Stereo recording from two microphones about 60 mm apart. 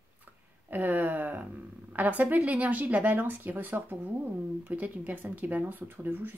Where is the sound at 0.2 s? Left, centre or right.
Right.